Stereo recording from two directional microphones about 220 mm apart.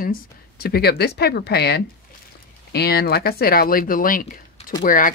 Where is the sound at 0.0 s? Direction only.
40° left (ahead or behind).